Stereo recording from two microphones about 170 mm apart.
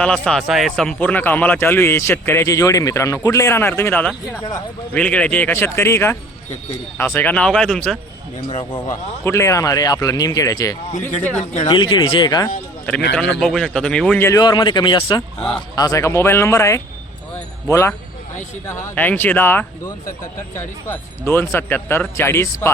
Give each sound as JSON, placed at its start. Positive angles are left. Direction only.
{"t": 0.0, "sound": "a man's voice", "side_deg": 5}
{"t": 9.2, "sound": "speech", "side_deg": 15}
{"t": 11.1, "sound": "a man's voice", "side_deg": 45}
{"t": 11.7, "sound": "speech", "side_deg": 25}
{"t": 13.4, "sound": "speech", "side_deg": 5}
{"t": 14.3, "sound": "a man's voice", "side_deg": 20}
{"t": 17.3, "sound": "jingle bell", "side_deg": 15}
{"t": 18.7, "sound": "a man's voice", "side_deg": 10}